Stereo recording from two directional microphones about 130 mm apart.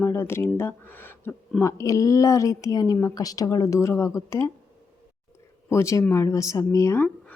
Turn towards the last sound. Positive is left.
turn(degrees=15)  # may be behind; listen again after turning